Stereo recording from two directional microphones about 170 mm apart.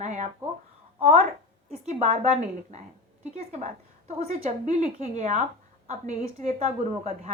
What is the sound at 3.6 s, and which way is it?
A woman's voice, 45° right (ahead or behind).